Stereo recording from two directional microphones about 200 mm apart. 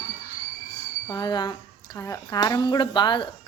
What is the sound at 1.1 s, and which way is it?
Speech, 20° left (ahead or behind).